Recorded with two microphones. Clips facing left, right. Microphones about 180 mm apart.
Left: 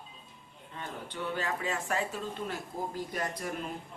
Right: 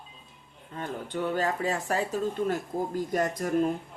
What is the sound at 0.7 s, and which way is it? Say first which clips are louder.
Speech: right 7 dB; 45° right (ahead or behind).